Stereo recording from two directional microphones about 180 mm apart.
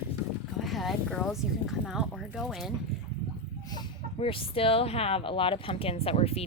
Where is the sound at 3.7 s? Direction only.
25° left (ahead or behind).